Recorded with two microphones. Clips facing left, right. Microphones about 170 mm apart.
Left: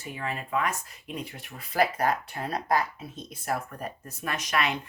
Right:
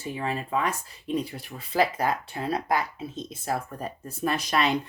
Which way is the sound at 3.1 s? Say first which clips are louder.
Right 1 dB; 25° right (ahead or behind).